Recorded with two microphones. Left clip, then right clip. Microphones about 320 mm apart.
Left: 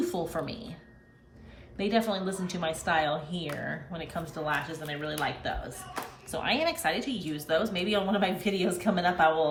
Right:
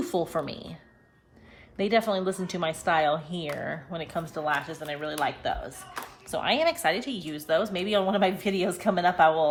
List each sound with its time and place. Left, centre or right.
0.0 s speech: right
1.8 s speech: right